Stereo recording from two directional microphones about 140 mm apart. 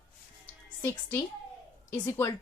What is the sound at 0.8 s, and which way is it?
A woman's voice, 15° left (ahead or behind).